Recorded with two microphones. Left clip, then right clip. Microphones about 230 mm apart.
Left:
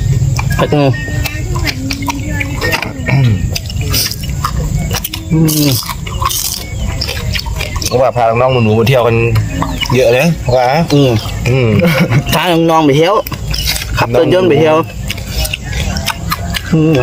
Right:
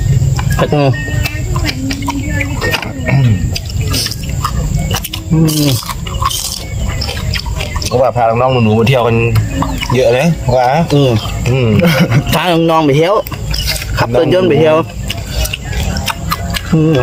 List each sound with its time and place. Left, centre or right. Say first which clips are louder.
0.3 s a sound: left 1 dB; centre
3.1 s drip: right 1 dB; left
4.0 s a sound: left 1 dB; centre
6.2 s wild animals: even; centre
7.6 s speech: even; left
10.9 s speech: left 1 dB; centre
11.4 s speech: left 2 dB; centre
11.8 s speech: even; centre
12.3 s speech: left 1 dB; centre
16.0 s a sound: right 1 dB; centre